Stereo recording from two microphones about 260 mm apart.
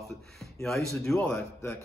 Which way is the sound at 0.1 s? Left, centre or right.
Centre.